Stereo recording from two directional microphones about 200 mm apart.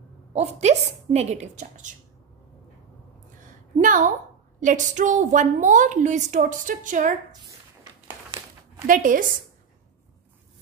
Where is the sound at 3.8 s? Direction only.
40° right (ahead or behind).